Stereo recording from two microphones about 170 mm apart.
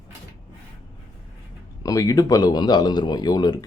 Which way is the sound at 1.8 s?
20° left (ahead or behind).